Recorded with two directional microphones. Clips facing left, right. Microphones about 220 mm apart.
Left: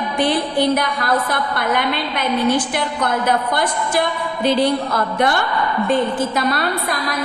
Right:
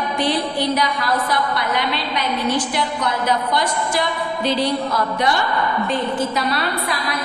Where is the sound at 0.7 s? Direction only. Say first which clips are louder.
Left 2 dB; 50° left (ahead or behind).